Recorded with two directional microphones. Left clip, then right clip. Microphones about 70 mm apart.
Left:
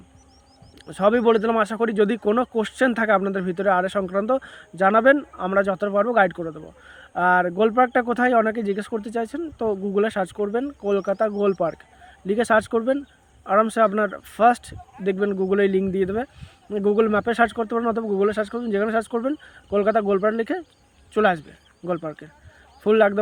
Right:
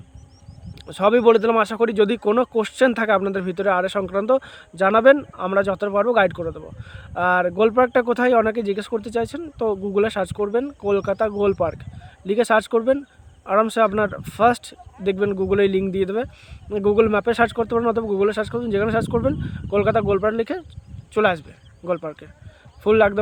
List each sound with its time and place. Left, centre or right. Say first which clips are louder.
0.9 s speech: right 3 dB; right
15.0 s a man's voice: right 2 dB; right
18.3 s speech: right 1 dB; right
18.5 s a man's voice: right 2 dB; right